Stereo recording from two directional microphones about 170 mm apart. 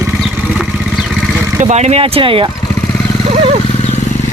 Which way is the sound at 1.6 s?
40° right (ahead or behind).